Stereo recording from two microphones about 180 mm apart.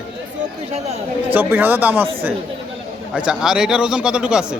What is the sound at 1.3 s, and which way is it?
Speech, 10° right (ahead or behind).